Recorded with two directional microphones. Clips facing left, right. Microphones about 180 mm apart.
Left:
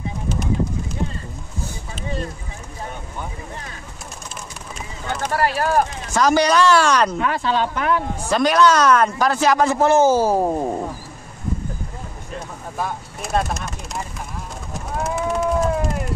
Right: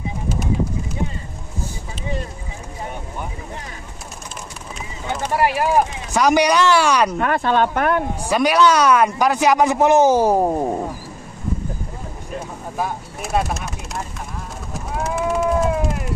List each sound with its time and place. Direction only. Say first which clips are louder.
5.0 s speech: right 2 dB; 5° right (ahead or behind)
7.2 s speech: right 3 dB; 55° right (ahead or behind)
8.2 s speech: even; 10° right (ahead or behind)
12.4 s speech: right 2 dB; 10° right (ahead or behind)
15.0 s run: right 2 dB; 5° right (ahead or behind)